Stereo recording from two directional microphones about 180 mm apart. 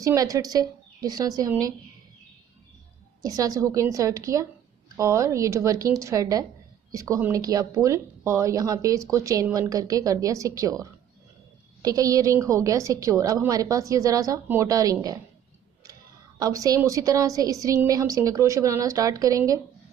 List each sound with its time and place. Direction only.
0.0 s speech: 20° right (ahead or behind)
3.2 s a woman's voice: 20° right (ahead or behind)